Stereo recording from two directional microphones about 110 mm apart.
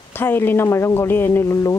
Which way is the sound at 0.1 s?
20° left (ahead or behind).